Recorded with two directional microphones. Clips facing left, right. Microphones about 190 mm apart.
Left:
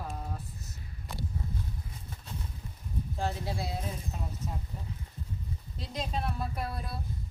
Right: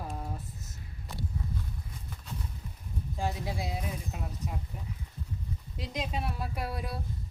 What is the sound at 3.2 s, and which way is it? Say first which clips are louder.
Speech: even; 15° right (ahead or behind).